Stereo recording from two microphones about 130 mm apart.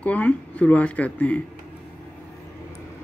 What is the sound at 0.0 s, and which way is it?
Speech, 10° left (ahead or behind).